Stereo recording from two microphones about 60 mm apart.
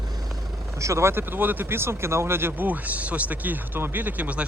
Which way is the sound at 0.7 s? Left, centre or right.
Right.